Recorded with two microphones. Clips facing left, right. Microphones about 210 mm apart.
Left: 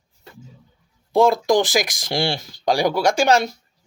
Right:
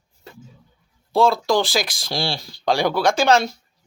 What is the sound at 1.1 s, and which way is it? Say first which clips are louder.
Speech: left 2 dB; 15° left (ahead or behind).